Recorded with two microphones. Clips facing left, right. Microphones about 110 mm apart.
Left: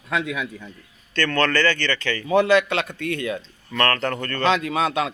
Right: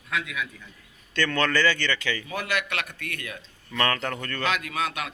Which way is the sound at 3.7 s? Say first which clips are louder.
Left 4 dB; 10° right (ahead or behind).